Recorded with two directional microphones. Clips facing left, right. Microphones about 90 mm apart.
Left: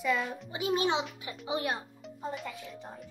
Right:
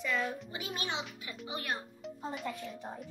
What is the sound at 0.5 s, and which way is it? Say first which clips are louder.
A child's voice: left 9 dB; 25° left (ahead or behind).